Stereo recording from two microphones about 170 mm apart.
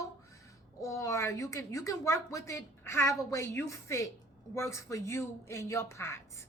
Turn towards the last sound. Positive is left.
turn(degrees=15)  # may be behind; listen again after turning